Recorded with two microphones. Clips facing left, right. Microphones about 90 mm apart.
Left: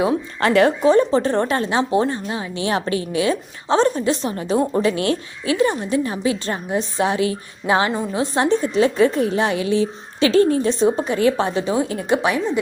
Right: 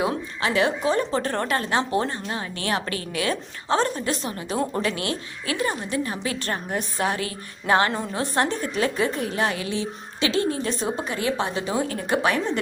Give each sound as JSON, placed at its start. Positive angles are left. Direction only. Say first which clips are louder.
{"t": 0.4, "sound": "speech", "louder": "left 7 dB", "side_deg": 55}
{"t": 0.8, "sound": "a woman's voice", "louder": "left 8 dB", "side_deg": 30}